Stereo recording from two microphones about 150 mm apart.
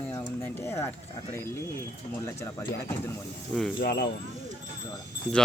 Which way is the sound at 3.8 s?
90° left.